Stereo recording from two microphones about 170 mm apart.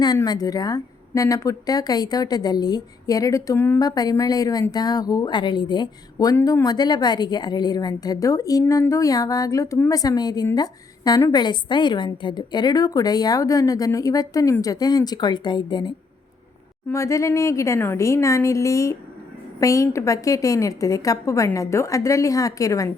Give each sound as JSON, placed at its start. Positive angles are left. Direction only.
{"t": 0.0, "sound": "a woman's voice", "side_deg": 25}
{"t": 16.9, "sound": "a woman's voice", "side_deg": 20}